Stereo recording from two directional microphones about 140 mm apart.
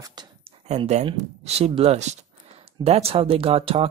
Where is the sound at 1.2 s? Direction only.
50° right (ahead or behind).